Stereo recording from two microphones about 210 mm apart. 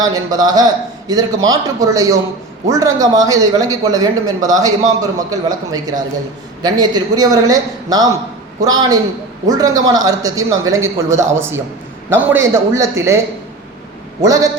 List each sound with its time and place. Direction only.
0.0 s a man's voice: 20° right (ahead or behind)
14.2 s speech: 15° right (ahead or behind)